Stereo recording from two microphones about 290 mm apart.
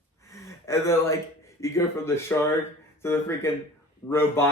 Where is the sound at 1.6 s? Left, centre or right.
Centre.